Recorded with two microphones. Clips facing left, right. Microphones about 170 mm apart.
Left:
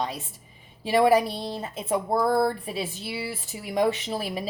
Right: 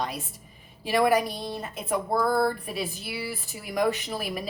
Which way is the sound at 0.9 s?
25° left (ahead or behind).